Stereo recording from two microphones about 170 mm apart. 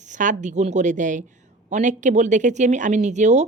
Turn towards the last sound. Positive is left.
turn(degrees=-45)  # may be behind; listen again after turning